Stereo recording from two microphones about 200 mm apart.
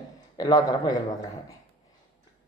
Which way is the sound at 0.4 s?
20° left (ahead or behind).